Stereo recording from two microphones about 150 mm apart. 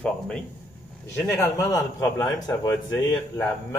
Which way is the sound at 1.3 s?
20° left (ahead or behind).